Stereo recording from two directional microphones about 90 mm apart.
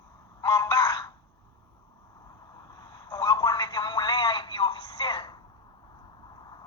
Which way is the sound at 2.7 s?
45° left (ahead or behind).